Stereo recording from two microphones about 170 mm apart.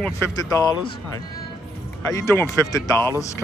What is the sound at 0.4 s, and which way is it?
Speech, 20° left (ahead or behind).